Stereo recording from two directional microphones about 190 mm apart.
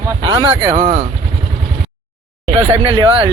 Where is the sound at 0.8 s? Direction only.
40° right (ahead or behind).